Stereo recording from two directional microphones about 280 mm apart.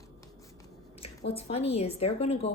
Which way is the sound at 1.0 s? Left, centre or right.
Left.